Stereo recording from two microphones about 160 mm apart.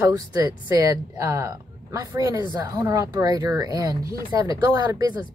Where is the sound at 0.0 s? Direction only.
20° right (ahead or behind).